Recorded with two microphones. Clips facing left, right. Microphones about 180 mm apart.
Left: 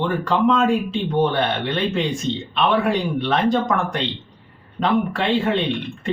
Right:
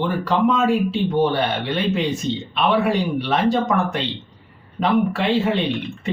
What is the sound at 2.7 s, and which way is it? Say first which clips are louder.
Speech: right 2 dB; 5° right (ahead or behind).